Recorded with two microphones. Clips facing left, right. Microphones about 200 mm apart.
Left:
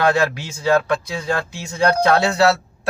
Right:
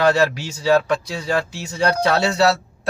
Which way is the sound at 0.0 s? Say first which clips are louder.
Right 1 dB; 50° left (ahead or behind).